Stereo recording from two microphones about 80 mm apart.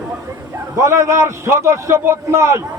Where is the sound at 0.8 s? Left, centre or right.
Right.